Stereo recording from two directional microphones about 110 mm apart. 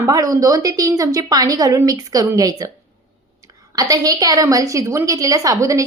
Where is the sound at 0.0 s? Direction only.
30° right (ahead or behind).